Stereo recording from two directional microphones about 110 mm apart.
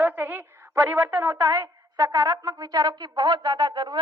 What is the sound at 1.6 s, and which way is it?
Speech, 30° right (ahead or behind).